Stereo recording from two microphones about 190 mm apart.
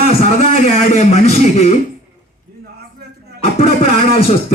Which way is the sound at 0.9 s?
35° left (ahead or behind).